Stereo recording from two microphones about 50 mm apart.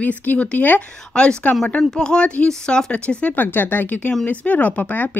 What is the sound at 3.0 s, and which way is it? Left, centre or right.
Speech, left.